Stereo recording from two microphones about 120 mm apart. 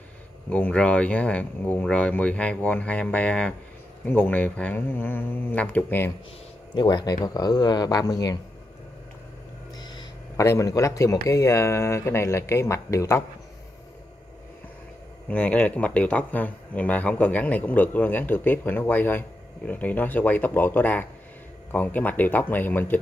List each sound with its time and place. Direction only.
0.5 s speech: 10° left (ahead or behind)
6.7 s speech: 40° left (ahead or behind)
9.8 s a sound: 35° left (ahead or behind)
10.4 s speech: 25° left (ahead or behind)
15.2 s speech: 10° left (ahead or behind)